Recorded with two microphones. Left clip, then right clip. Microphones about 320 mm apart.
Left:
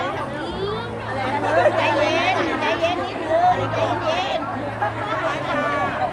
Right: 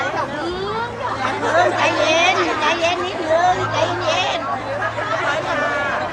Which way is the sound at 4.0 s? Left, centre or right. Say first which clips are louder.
Right 3 dB; right.